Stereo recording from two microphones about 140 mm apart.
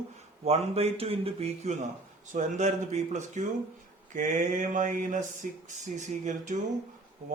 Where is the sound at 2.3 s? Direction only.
60° right (ahead or behind).